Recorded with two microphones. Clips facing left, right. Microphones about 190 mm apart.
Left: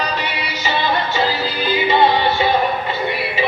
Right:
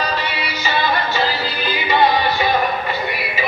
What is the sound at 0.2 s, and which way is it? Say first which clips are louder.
Music: even; 20° left (ahead or behind).